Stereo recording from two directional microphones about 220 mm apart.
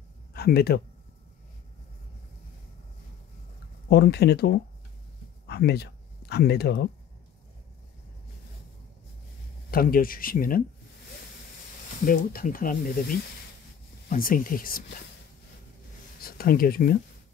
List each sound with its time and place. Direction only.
0.3 s speech: 45° left (ahead or behind)
3.9 s speech: 50° left (ahead or behind)
9.7 s speech: 40° left (ahead or behind)
12.1 s speech: 40° left (ahead or behind)
16.2 s speech: 40° left (ahead or behind)